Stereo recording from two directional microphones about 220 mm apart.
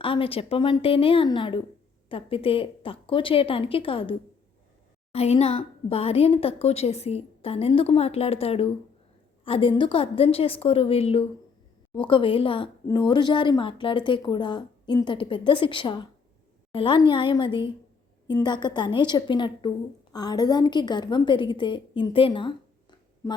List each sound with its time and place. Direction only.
0.0 s speech: 25° left (ahead or behind)
5.1 s a woman's voice: 30° left (ahead or behind)